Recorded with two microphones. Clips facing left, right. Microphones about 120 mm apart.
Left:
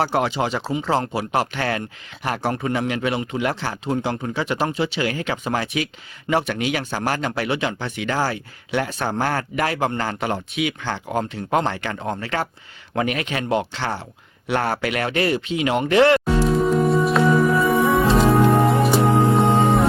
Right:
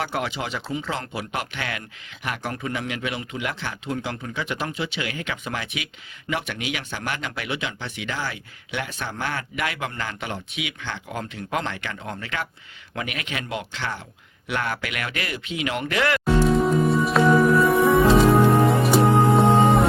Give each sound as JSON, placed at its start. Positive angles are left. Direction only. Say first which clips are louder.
{"t": 0.0, "sound": "speech", "louder": "left 7 dB", "side_deg": 30}
{"t": 16.6, "sound": "music", "louder": "left 2 dB", "side_deg": 0}